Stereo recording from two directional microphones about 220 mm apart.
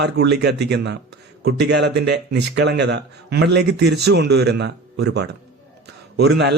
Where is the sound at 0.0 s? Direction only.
50° right (ahead or behind).